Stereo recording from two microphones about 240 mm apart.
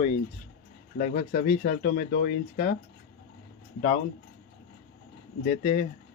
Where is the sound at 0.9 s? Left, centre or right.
Left.